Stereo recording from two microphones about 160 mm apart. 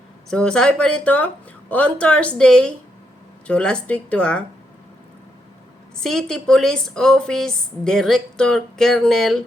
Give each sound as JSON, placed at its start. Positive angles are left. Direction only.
{"t": 0.3, "sound": "a woman's voice", "side_deg": 5}
{"t": 6.0, "sound": "a woman's voice", "side_deg": 5}